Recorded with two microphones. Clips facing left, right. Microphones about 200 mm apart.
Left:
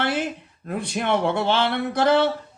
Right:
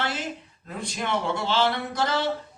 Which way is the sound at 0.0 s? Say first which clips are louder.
Left 6 dB; 60° left (ahead or behind).